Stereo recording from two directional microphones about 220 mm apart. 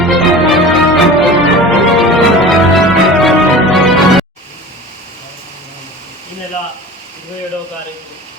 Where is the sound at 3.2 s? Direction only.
Centre (ahead or behind).